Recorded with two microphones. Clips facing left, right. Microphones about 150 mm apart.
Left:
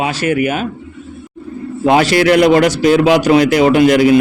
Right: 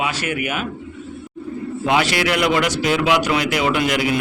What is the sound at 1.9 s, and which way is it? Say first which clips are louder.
A man's voice: left 8 dB; 40° left (ahead or behind).